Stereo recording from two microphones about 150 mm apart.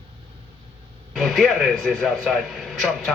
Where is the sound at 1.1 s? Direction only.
Centre (ahead or behind).